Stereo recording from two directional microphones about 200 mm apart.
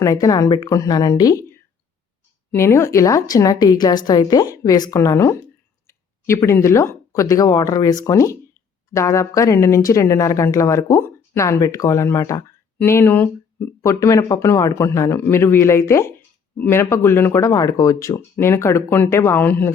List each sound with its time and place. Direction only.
0.0 s a woman's voice: 15° left (ahead or behind)
2.5 s a woman's voice: 10° left (ahead or behind)